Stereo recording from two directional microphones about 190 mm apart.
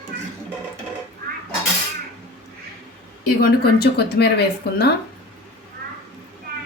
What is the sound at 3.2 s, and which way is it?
Speech, 50° left (ahead or behind).